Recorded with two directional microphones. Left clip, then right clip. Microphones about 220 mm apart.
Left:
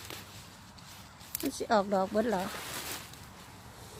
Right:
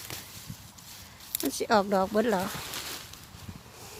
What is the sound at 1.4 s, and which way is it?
Speech, 30° right (ahead or behind).